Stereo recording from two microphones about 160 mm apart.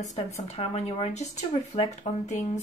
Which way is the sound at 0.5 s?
40° left (ahead or behind).